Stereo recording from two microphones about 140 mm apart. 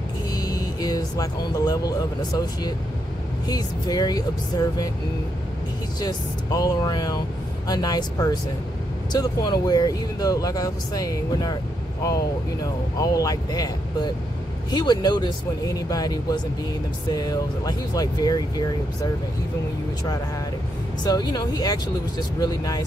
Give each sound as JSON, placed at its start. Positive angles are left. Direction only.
{"t": 0.4, "sound": "speech", "side_deg": 25}
{"t": 5.9, "sound": "speech", "side_deg": 25}
{"t": 13.0, "sound": "speech", "side_deg": 25}
{"t": 21.0, "sound": "speech", "side_deg": 30}